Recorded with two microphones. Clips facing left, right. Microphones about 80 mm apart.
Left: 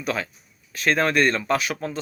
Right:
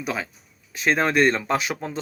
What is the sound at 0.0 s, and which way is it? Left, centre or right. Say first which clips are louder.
Speech: left 1 dB; centre.